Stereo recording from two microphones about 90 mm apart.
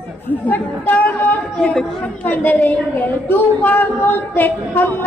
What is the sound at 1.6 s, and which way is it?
Speech, 5° left (ahead or behind).